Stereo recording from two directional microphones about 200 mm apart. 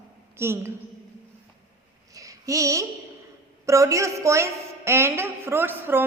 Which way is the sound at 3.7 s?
15° right (ahead or behind).